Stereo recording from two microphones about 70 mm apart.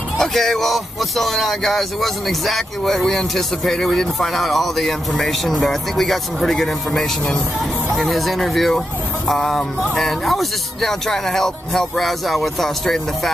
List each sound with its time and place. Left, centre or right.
0.2 s speech: centre